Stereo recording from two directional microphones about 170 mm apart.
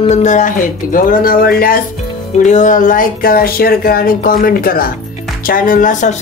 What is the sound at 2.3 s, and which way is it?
Speech, 45° left (ahead or behind).